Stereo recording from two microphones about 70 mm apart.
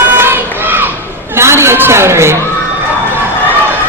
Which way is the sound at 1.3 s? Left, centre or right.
Right.